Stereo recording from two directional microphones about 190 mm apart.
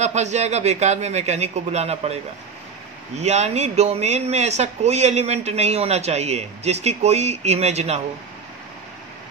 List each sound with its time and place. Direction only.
0.0 s speech: 35° right (ahead or behind)
3.2 s speech: 35° right (ahead or behind)